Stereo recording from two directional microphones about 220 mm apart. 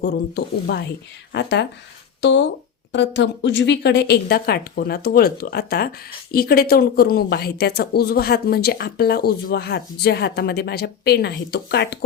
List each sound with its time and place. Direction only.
0.0 s a woman's voice: 50° left (ahead or behind)